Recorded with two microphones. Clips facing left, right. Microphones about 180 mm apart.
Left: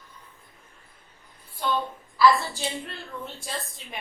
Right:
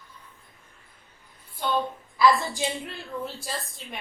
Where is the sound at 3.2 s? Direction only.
Centre (ahead or behind).